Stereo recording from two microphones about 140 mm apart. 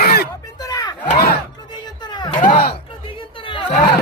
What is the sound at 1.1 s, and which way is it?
Crowd, 90° left.